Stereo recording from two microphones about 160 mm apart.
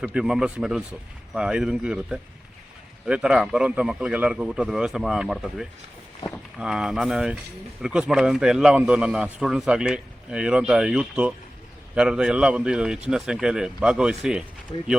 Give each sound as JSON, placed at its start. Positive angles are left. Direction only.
{"t": 0.0, "sound": "a man's voice", "side_deg": -5}
{"t": 14.7, "sound": "speech", "side_deg": 30}